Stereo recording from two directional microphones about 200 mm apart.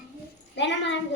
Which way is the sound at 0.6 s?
60° left (ahead or behind).